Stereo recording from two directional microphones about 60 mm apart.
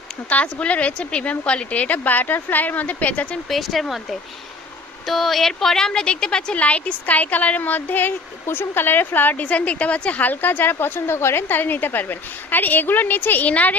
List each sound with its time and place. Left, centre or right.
0.3 s speech: left
3.5 s speech: centre
5.0 s speech: centre; by 13.7 s left